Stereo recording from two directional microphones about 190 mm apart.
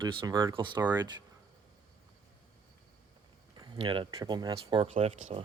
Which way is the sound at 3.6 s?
25° right (ahead or behind).